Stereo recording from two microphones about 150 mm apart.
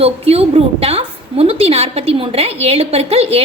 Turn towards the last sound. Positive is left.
turn(degrees=-45)  # may be behind; listen again after turning